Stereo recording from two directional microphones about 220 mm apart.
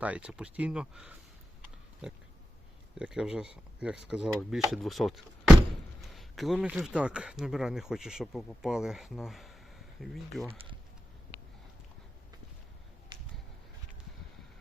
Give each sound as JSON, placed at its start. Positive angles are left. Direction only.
{"t": 0.0, "sound": "speech", "side_deg": -5}
{"t": 10.5, "sound": "speech", "side_deg": -25}
{"t": 13.1, "sound": "a sound", "side_deg": -20}